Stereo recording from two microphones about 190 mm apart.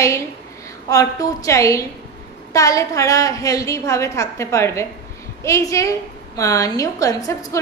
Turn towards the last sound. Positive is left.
turn(degrees=15)  # may be behind; listen again after turning